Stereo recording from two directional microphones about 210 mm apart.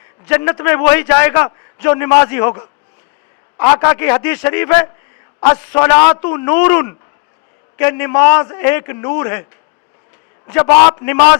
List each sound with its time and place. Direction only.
0.3 s a man's voice: 10° left (ahead or behind)